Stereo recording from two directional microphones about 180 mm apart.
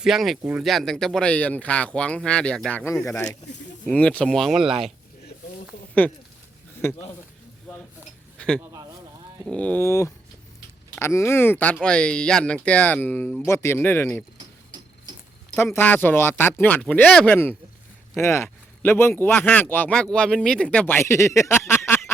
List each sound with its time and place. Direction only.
0.0 s speech: centre (ahead or behind)
6.0 s speech: 10° left (ahead or behind)
8.4 s a sound: 5° left (ahead or behind)
8.6 s a sound: 20° right (ahead or behind)
9.5 s speech: 10° left (ahead or behind)
15.5 s speech: 10° left (ahead or behind)